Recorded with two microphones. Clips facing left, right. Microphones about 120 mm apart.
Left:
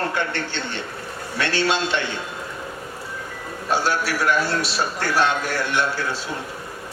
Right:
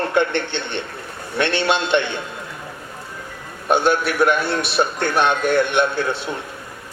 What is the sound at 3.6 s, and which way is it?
Speech, 60° right (ahead or behind).